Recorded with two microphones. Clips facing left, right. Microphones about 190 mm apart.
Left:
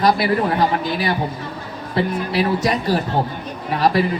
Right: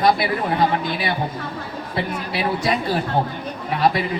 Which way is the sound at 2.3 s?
40° left (ahead or behind).